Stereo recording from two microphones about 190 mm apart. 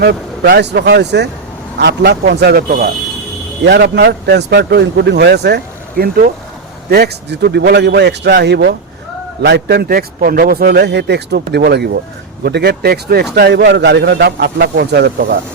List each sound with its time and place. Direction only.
0.0 s a man's voice: 60° right (ahead or behind)
3.6 s a man's voice: 60° right (ahead or behind)